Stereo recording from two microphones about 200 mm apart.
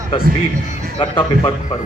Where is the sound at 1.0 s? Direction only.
25° left (ahead or behind).